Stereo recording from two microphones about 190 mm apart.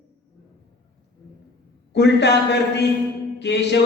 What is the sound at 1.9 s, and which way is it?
Speech, 65° left (ahead or behind).